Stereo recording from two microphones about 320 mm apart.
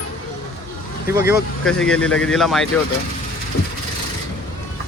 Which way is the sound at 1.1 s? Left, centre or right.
Centre.